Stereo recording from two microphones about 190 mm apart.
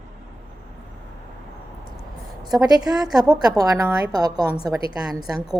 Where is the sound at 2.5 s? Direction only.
20° right (ahead or behind).